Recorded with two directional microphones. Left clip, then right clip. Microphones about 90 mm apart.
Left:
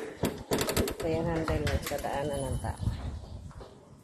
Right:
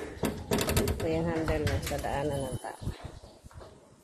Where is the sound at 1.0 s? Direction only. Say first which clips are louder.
Right 1 dB; 35° right (ahead or behind).